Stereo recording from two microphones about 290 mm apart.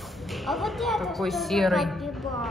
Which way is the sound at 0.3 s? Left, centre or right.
Centre.